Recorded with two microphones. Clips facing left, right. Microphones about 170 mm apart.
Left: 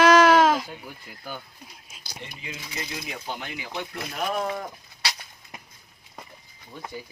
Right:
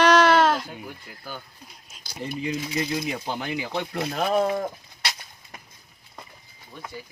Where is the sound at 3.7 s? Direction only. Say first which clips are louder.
Right 3 dB; 30° right (ahead or behind).